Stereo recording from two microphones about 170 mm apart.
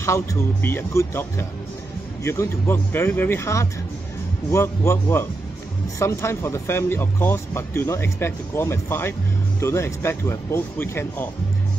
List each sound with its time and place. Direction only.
0.0 s speech: 15° left (ahead or behind)
2.2 s speech: 15° left (ahead or behind)